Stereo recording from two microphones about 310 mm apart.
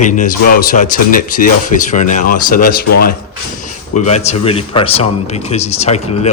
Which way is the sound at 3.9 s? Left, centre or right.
Left.